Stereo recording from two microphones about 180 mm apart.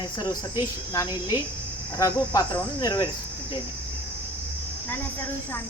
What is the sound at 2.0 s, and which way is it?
Cricket, 20° left (ahead or behind).